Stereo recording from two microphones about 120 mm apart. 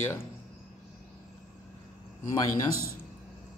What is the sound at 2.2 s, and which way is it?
Speech, 30° left (ahead or behind).